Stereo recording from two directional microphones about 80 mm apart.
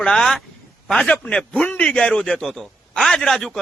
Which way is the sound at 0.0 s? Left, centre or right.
Centre.